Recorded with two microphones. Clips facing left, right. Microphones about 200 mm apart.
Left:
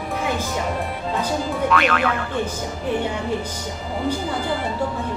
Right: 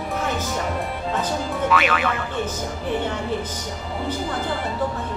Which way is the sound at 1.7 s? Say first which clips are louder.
Left 1 dB; centre (ahead or behind).